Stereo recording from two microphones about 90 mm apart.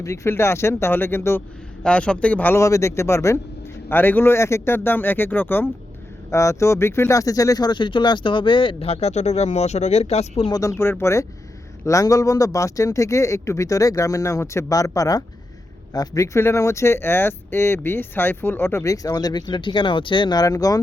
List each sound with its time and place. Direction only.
0.0 s speech: 35° left (ahead or behind)
1.8 s speech: 10° left (ahead or behind)
2.6 s speech: 35° left (ahead or behind)
6.3 s speech: 35° left (ahead or behind); by 8.9 s 75° left (ahead or behind)
9.7 s speech: 90° left
10.5 s speech: 35° left (ahead or behind)